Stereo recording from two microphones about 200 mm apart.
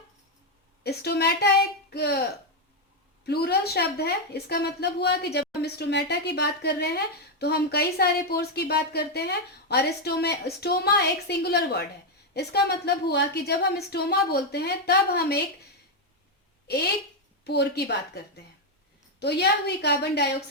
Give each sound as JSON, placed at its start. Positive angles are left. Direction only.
{"t": 0.9, "sound": "a woman's voice", "side_deg": 55}
{"t": 3.2, "sound": "a woman's voice", "side_deg": 55}
{"t": 16.6, "sound": "a woman's voice", "side_deg": 55}
{"t": 19.2, "sound": "a woman's voice", "side_deg": 55}